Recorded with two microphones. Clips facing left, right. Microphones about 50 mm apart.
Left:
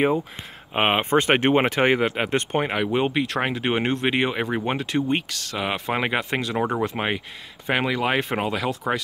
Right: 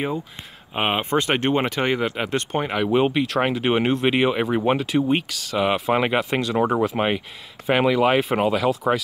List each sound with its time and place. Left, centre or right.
0.7 s speech: centre
2.9 s speech: centre